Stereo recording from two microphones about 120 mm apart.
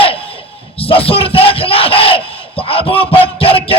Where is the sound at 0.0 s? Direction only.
50° left (ahead or behind).